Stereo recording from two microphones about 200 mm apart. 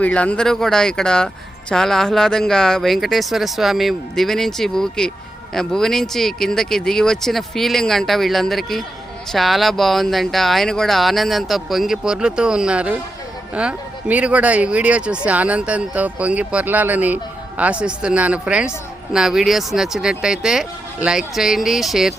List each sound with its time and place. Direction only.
0.0 s speech: 5° left (ahead or behind)